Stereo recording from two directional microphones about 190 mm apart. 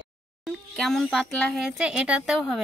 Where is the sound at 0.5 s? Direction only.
Centre (ahead or behind).